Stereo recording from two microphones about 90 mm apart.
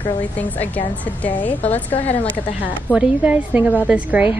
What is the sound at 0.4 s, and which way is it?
A woman's voice, 20° left (ahead or behind).